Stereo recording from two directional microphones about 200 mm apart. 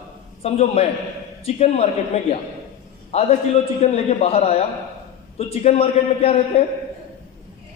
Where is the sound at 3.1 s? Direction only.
30° left (ahead or behind).